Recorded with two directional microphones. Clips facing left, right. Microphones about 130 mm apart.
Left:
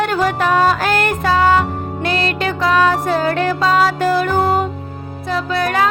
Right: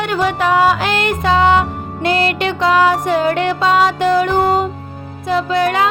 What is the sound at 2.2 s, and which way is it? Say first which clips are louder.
Music: right 3 dB; 35° left (ahead or behind).